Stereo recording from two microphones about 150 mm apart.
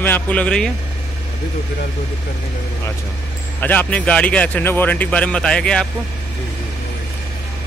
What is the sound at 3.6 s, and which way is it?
Speech, 10° left (ahead or behind).